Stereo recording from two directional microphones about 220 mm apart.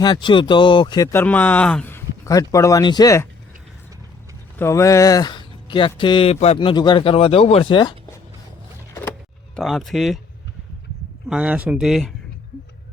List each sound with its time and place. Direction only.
0.0 s speech: 20° left (ahead or behind)
4.5 s speech: 10° left (ahead or behind)
9.6 s speech: centre (ahead or behind)
11.3 s speech: 5° right (ahead or behind)